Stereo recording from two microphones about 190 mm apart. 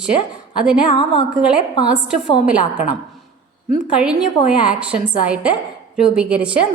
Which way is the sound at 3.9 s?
5° right (ahead or behind).